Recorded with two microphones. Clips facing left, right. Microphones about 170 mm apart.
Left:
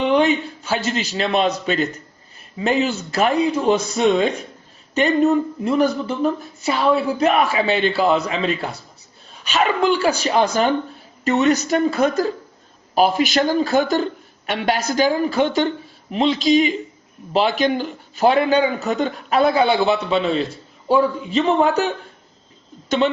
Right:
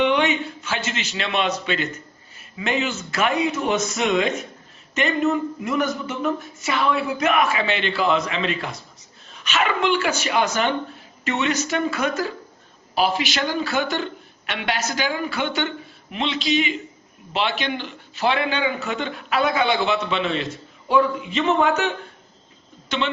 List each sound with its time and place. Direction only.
0.0 s a man's voice: 35° left (ahead or behind)